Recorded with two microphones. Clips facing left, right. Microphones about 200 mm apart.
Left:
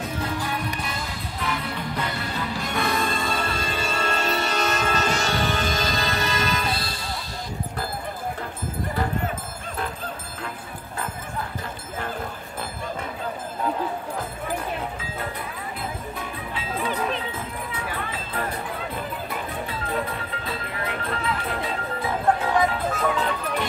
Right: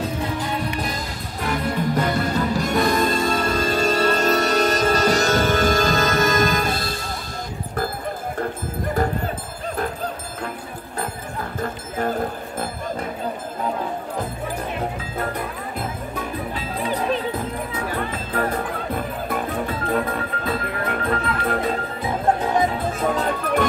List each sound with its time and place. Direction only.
1.4 s music: 45° right (ahead or behind)
11.6 s music: 45° right (ahead or behind)
16.5 s music: 40° right (ahead or behind)
23.0 s music: 45° right (ahead or behind)